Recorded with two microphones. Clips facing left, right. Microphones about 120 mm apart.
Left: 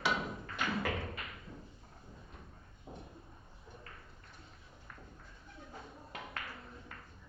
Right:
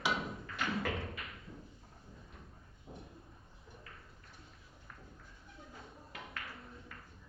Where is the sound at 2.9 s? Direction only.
30° left (ahead or behind).